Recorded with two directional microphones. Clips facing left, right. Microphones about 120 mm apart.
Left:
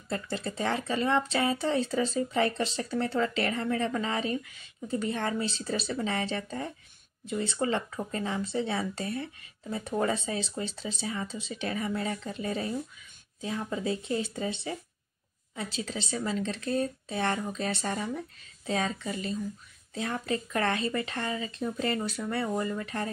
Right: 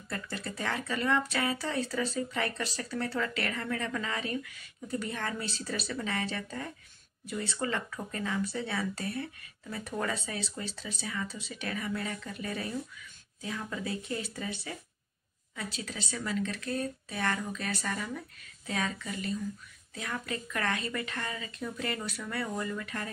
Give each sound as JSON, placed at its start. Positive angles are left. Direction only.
{"t": 0.1, "sound": "speech", "side_deg": 25}